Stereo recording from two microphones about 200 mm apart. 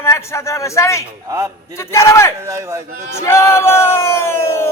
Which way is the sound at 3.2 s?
15° left (ahead or behind).